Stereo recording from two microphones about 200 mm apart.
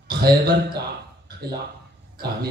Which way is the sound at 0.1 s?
50° right (ahead or behind).